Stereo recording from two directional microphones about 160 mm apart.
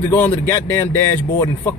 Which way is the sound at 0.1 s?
15° left (ahead or behind).